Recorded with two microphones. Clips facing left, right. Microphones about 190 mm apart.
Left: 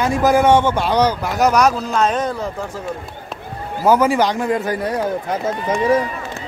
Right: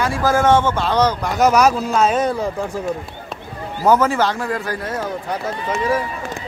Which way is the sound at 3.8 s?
10° left (ahead or behind).